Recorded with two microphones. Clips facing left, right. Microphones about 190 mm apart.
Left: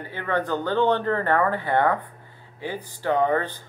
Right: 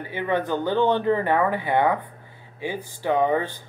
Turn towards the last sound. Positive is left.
turn(degrees=-15)  # may be behind; listen again after turning